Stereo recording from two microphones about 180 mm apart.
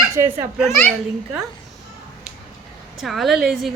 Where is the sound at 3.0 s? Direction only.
Centre (ahead or behind).